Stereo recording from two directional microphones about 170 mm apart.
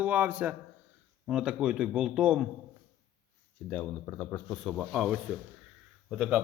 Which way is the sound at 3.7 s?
10° left (ahead or behind).